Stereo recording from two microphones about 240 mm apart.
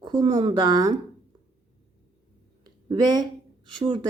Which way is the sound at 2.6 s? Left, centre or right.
Centre.